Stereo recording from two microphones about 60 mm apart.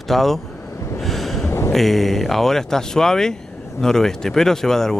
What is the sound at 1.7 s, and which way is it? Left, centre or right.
Speech, centre.